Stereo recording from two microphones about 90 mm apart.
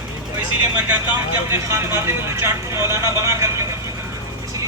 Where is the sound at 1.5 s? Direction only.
30° right (ahead or behind).